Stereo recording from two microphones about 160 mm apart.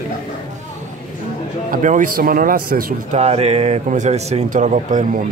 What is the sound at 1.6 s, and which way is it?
Speech, 55° right (ahead or behind).